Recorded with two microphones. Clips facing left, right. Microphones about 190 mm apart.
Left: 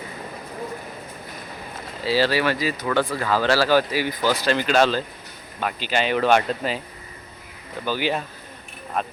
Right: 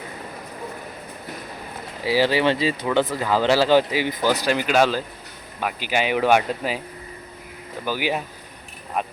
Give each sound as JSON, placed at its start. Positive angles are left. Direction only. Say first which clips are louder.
{"t": 2.0, "sound": "speech", "louder": "right 1 dB", "side_deg": -15}
{"t": 7.9, "sound": "speech", "louder": "even", "side_deg": -10}